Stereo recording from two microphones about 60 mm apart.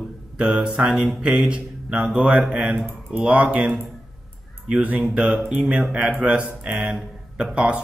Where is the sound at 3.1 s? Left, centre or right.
Right.